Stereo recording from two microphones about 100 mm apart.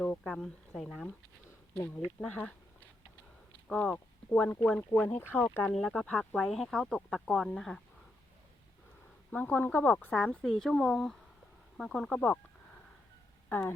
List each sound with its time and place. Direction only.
0.0 s speech: 10° left (ahead or behind)
1.7 s speech: 15° left (ahead or behind)
3.7 s speech: 10° left (ahead or behind)
5.7 s speech: 5° left (ahead or behind)
9.3 s speech: 15° left (ahead or behind)
13.5 s speech: 20° left (ahead or behind)